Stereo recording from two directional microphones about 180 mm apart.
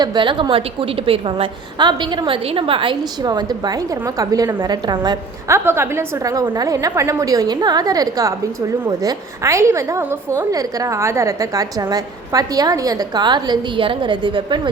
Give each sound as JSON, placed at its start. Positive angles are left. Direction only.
{"t": 0.0, "sound": "a woman's voice", "side_deg": -25}